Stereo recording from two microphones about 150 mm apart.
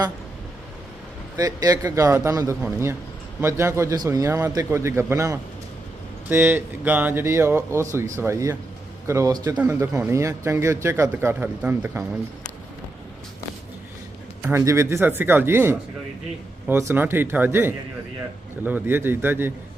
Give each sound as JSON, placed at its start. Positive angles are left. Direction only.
{"t": 1.4, "sound": "a man's voice", "side_deg": -25}
{"t": 14.4, "sound": "speech", "side_deg": -20}